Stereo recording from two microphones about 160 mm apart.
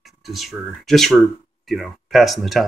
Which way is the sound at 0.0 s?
Centre (ahead or behind).